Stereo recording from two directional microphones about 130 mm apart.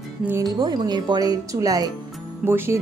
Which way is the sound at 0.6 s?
35° right (ahead or behind).